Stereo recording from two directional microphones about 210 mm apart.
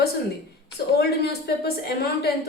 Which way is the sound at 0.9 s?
50° left (ahead or behind).